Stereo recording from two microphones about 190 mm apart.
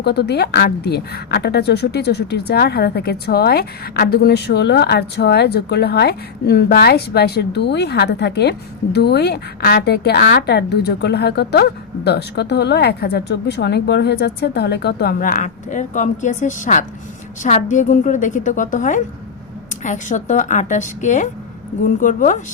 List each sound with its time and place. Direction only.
0.0 s a woman's voice: 60° left (ahead or behind); by 22.4 s 40° left (ahead or behind)